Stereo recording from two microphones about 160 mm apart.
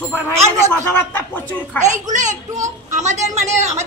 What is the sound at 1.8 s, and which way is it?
Speech, 50° right (ahead or behind).